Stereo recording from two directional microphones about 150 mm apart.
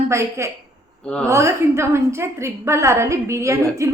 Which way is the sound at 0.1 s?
20° right (ahead or behind).